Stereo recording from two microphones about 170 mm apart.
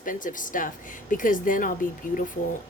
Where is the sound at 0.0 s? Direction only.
50° left (ahead or behind).